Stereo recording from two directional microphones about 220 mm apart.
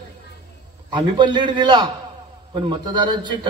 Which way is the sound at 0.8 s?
20° right (ahead or behind).